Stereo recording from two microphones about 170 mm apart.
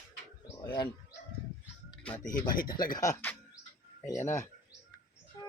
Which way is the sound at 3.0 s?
15° left (ahead or behind).